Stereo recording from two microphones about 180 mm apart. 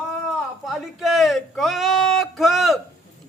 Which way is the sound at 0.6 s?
Centre (ahead or behind).